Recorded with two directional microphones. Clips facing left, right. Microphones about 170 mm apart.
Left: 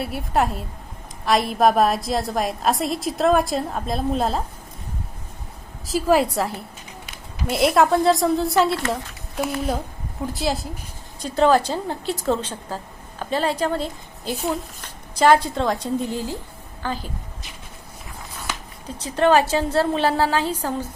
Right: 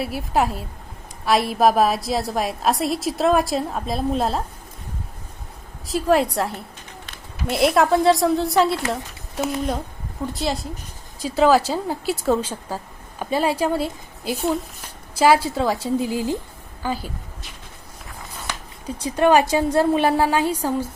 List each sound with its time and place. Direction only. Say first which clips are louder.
0.0 s a woman's voice: right 1 dB; centre (ahead or behind)
5.8 s a woman's voice: even; centre (ahead or behind)
18.9 s a woman's voice: right 1 dB; 10° right (ahead or behind)